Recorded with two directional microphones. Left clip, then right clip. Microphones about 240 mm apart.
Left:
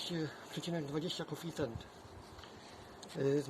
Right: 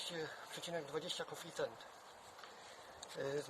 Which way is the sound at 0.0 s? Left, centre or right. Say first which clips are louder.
Left 4 dB; centre.